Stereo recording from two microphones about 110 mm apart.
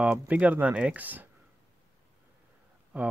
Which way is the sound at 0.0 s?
15° right (ahead or behind).